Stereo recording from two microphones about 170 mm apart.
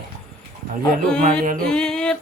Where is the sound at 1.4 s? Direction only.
50° right (ahead or behind).